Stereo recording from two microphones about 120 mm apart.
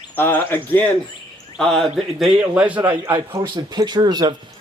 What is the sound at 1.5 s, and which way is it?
Speech, 5° left (ahead or behind).